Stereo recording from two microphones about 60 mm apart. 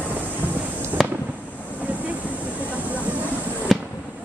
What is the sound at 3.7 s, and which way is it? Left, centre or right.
Fireworks, centre.